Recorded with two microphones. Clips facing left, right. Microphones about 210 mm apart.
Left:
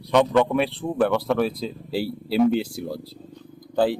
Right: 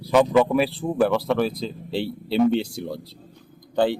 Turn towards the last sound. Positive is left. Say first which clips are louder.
# even
turn(degrees=5)  # may be behind; listen again after turning